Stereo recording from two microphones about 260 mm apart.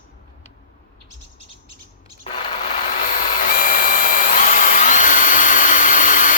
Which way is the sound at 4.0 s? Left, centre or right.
Left.